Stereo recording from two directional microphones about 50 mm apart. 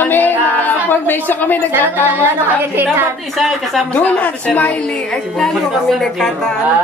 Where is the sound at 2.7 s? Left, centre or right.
Right.